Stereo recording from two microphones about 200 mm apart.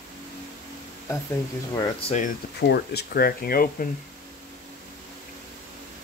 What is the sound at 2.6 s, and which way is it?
Speech, 55° left (ahead or behind).